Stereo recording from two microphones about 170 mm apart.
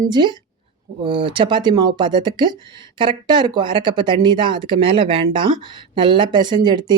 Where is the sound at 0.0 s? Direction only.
25° right (ahead or behind).